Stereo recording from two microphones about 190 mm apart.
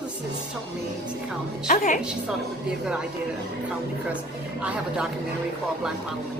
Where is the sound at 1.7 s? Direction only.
40° left (ahead or behind).